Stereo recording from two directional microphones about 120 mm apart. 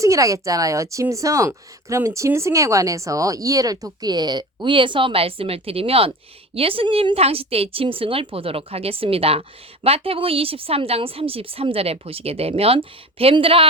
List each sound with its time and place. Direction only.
0.0 s a woman's voice: 25° right (ahead or behind); by 13.7 s 50° right (ahead or behind)